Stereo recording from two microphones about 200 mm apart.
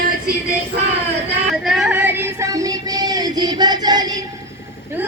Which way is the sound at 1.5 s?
Centre (ahead or behind).